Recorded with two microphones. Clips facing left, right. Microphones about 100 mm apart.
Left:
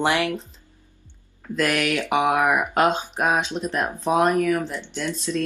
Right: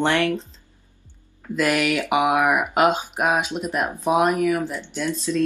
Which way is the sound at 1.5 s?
Centre (ahead or behind).